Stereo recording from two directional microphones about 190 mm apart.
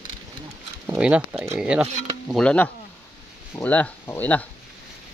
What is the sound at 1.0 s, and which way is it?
Speech, 5° right (ahead or behind).